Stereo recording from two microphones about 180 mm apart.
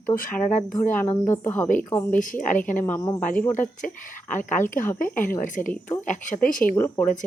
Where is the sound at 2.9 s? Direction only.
15° left (ahead or behind).